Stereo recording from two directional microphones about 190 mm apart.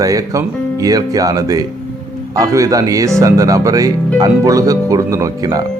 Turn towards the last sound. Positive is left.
turn(degrees=-20)  # may be behind; listen again after turning